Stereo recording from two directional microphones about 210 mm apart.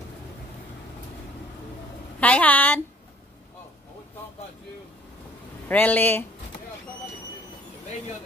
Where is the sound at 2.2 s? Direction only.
5° left (ahead or behind).